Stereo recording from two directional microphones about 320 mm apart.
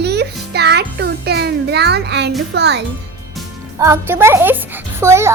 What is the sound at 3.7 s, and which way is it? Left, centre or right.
Speech, centre.